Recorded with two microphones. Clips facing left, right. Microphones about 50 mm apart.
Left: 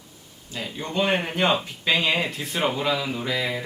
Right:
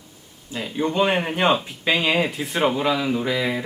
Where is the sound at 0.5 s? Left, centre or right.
Centre.